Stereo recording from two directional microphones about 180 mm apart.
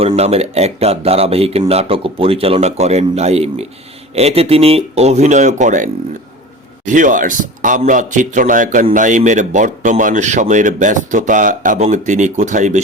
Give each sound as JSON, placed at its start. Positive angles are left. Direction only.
{"t": 0.2, "sound": "speech", "side_deg": -35}